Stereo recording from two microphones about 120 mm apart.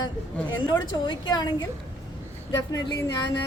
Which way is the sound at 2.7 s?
30° left (ahead or behind).